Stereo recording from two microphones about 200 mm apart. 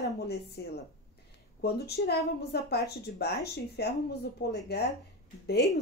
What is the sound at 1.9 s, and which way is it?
A woman's voice, 55° left (ahead or behind).